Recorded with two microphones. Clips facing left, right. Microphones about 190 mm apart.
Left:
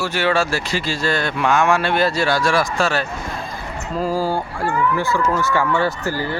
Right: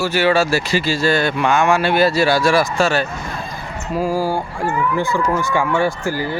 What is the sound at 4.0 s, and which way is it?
Speech, 10° right (ahead or behind).